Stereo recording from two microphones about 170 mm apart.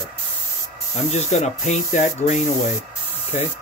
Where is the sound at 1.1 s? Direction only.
45° left (ahead or behind).